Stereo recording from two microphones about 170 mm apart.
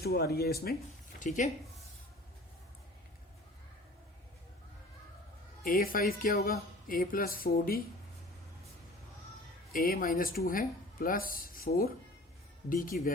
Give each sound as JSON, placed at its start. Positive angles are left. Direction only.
{"t": 0.0, "sound": "speech", "side_deg": 65}
{"t": 1.2, "sound": "speech", "side_deg": 45}
{"t": 5.6, "sound": "speech", "side_deg": 60}
{"t": 9.7, "sound": "speech", "side_deg": 55}